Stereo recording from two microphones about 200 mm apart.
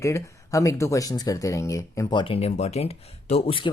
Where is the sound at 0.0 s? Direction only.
15° left (ahead or behind).